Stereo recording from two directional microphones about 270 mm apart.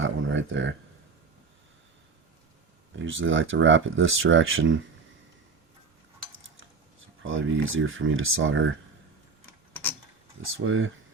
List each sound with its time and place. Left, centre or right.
0.0 s a sound: right
3.0 s speech: right
7.2 s speech: right
10.4 s speech: right